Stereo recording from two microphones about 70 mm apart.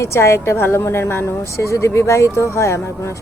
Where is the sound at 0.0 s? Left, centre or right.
Left.